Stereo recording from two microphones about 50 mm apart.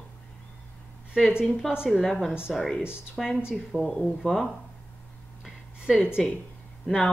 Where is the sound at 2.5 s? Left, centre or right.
Centre.